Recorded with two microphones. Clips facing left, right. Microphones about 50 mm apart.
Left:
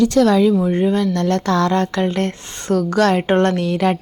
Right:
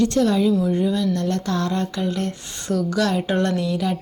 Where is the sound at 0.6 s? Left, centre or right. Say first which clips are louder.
Left 4 dB; left.